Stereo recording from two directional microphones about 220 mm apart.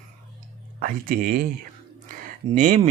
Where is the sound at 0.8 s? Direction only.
40° right (ahead or behind).